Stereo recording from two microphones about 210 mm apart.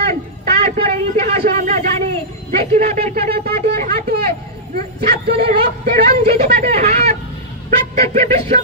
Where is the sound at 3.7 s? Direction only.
50° right (ahead or behind).